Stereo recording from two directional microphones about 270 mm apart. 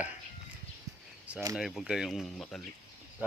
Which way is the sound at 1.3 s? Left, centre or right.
Centre.